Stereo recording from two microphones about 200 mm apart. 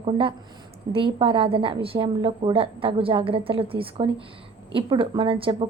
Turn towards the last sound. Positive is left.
turn(degrees=-25)  # may be behind; listen again after turning